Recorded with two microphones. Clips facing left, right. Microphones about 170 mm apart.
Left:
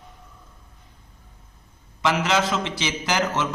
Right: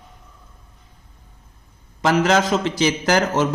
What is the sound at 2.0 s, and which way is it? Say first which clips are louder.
Speech: right 5 dB; 40° right (ahead or behind).